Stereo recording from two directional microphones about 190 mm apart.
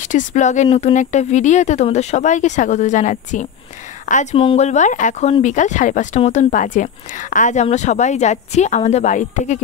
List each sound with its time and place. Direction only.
0.1 s speech: 40° left (ahead or behind)